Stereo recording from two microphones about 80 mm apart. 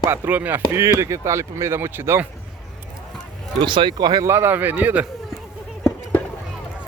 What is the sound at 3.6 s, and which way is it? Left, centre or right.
Speech, right.